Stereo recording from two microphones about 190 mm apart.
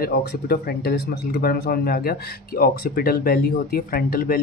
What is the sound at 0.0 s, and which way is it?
Speech, 55° left (ahead or behind).